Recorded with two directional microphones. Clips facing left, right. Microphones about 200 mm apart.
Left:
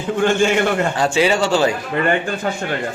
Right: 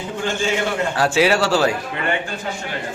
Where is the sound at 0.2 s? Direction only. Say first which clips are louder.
Left 7 dB; 60° left (ahead or behind).